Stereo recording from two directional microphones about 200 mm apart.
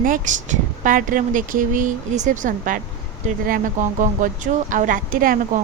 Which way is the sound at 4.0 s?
40° right (ahead or behind).